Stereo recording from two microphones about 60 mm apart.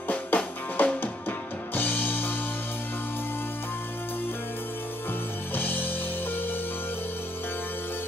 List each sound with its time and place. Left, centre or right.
0.1 s music: left
5.5 s music: left